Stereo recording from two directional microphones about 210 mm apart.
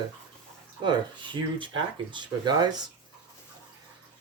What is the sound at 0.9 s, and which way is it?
Speech, 25° right (ahead or behind).